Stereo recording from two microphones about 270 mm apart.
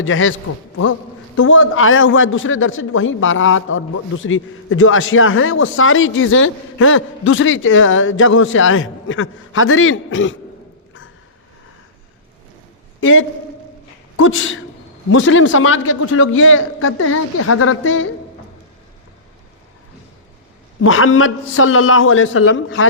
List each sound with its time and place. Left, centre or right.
0.0 s a man's voice: left
1.4 s a man's voice: left
13.0 s a man's voice: left
20.8 s a man's voice: left